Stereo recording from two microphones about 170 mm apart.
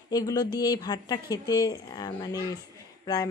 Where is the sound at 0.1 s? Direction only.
25° left (ahead or behind).